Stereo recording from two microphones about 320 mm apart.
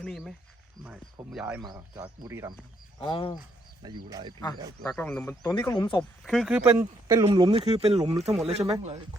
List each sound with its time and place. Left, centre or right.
0.0 s speech: centre
3.0 s speech: centre
3.8 s speech: centre
4.8 s speech: centre
6.2 s speech: centre